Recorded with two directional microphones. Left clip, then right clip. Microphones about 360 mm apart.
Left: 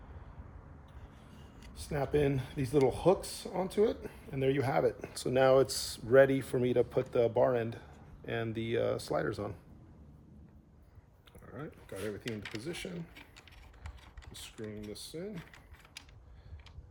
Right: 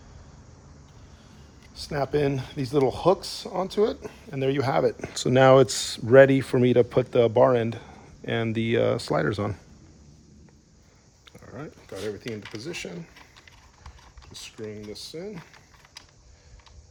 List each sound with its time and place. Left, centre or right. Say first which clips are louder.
1.7 s speech: right 6 dB; centre
11.3 s a sound: right 6 dB; centre
12.5 s speech: right 6 dB; centre
14.3 s speech: right 7 dB; centre